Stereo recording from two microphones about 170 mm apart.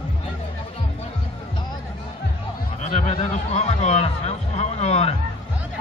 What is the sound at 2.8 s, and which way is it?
Speech, 40° left (ahead or behind).